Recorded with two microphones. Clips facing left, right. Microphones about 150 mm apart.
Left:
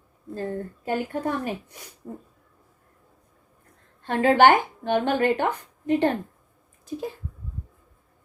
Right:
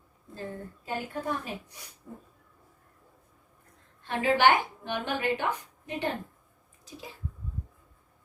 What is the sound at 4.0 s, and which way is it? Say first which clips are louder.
A woman's voice: left 6 dB; 50° left (ahead or behind).